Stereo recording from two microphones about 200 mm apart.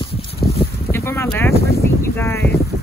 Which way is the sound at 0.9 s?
15° left (ahead or behind).